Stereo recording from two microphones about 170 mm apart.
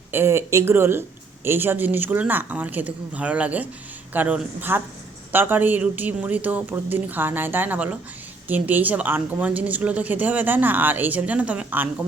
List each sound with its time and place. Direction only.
0.1 s a woman's voice: 15° right (ahead or behind)